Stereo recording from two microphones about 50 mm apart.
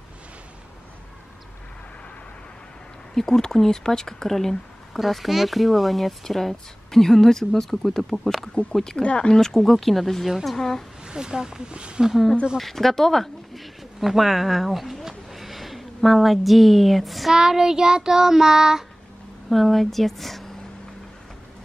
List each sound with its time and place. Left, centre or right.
3.2 s speech: centre
9.4 s speech: centre
11.1 s child singing: centre
12.5 s speech: centre
17.4 s child singing: centre
19.5 s speech: centre